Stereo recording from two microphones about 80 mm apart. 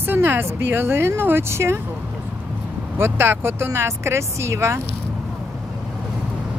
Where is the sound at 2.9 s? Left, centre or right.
Right.